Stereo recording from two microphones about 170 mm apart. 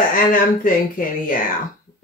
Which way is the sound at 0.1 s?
55° left (ahead or behind).